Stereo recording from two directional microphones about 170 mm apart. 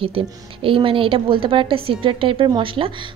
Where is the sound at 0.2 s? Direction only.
35° right (ahead or behind).